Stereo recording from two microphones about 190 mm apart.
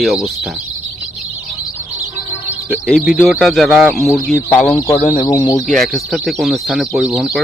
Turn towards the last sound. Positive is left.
turn(degrees=0)  # may be behind; listen again after turning